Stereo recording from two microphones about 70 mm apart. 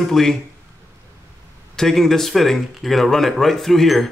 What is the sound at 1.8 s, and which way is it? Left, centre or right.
Speech, centre.